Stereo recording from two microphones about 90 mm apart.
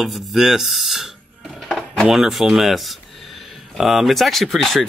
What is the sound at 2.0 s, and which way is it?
Speech, 5° right (ahead or behind).